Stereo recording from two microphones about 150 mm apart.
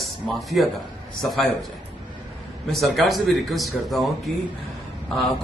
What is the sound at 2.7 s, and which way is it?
A man's voice, centre (ahead or behind).